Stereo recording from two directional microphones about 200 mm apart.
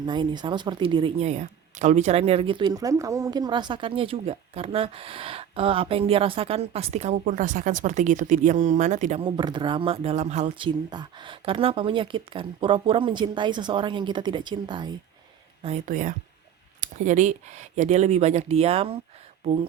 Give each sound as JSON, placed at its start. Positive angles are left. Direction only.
{"t": 0.0, "sound": "speech", "side_deg": -25}
{"t": 10.7, "sound": "speech", "side_deg": -20}
{"t": 15.6, "sound": "speech", "side_deg": -35}